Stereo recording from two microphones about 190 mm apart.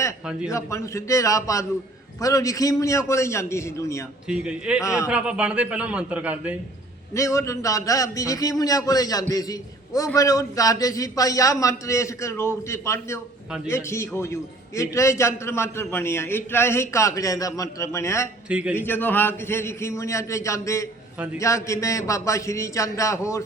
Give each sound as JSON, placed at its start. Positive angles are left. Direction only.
{"t": 0.5, "sound": "a man's voice", "side_deg": 15}
{"t": 4.3, "sound": "a man's voice", "side_deg": -5}
{"t": 4.8, "sound": "a man's voice", "side_deg": 15}
{"t": 5.0, "sound": "a man's voice", "side_deg": -5}
{"t": 7.1, "sound": "a man's voice", "side_deg": 15}
{"t": 18.4, "sound": "a man's voice", "side_deg": -5}
{"t": 18.8, "sound": "a man's voice", "side_deg": 10}